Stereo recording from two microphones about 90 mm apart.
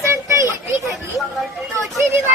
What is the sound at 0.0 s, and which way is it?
Children playing, 30° right (ahead or behind).